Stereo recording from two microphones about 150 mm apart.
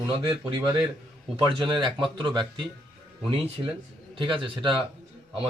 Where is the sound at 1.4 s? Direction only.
30° right (ahead or behind).